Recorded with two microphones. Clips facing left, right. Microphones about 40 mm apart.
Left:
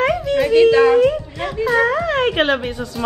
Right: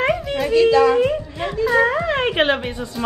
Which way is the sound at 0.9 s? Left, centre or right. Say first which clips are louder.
Left 4 dB; centre.